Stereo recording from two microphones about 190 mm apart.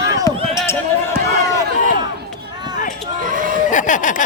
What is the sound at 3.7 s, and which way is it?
Speech, 45° left (ahead or behind).